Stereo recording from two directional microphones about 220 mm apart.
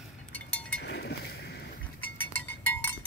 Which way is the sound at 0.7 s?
50° left (ahead or behind).